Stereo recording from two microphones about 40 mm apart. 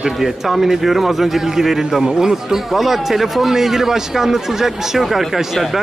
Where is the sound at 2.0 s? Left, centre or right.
Centre.